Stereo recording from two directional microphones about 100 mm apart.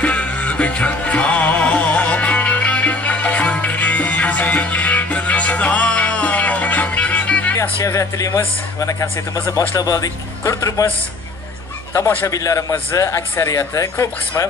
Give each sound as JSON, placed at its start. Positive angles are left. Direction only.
{"t": 0.0, "sound": "music", "side_deg": 15}
{"t": 7.8, "sound": "speech", "side_deg": 30}
{"t": 12.3, "sound": "speech", "side_deg": 30}